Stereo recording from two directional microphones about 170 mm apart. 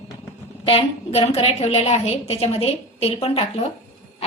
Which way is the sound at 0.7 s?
30° left (ahead or behind).